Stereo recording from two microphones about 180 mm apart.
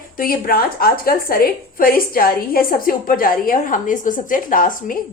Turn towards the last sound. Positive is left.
turn(degrees=50)  # may be behind; listen again after turning